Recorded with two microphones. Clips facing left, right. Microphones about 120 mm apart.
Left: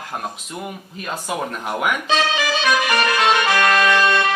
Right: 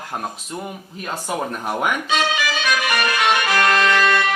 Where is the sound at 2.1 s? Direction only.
30° left (ahead or behind).